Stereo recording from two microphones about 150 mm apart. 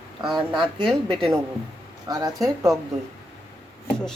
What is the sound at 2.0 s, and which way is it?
Speech, 25° right (ahead or behind).